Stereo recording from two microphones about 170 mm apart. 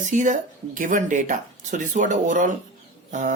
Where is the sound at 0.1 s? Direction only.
50° right (ahead or behind).